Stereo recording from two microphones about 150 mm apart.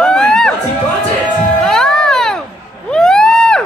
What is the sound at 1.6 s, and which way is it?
Music, 5° left (ahead or behind).